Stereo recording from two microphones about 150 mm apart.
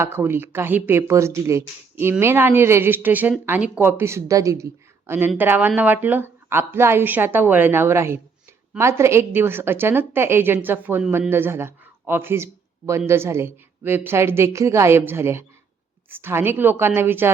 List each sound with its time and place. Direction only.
0.0 s speech: 15° right (ahead or behind)